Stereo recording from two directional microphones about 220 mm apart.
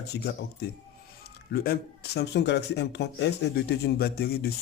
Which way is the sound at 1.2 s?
45° left (ahead or behind).